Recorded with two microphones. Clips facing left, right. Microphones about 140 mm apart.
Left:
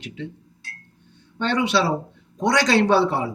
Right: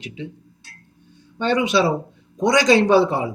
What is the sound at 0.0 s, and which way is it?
Speech, 10° right (ahead or behind).